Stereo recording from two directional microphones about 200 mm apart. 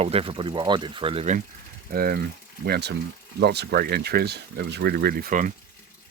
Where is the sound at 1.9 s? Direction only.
50° right (ahead or behind).